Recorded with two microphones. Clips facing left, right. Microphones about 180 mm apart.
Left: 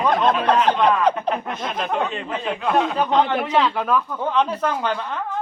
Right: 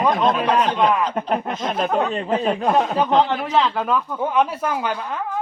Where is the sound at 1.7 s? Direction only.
40° right (ahead or behind).